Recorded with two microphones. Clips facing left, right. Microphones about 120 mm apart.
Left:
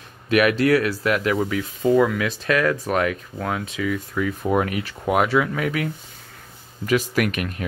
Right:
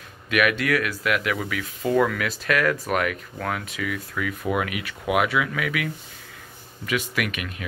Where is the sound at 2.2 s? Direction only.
25° left (ahead or behind).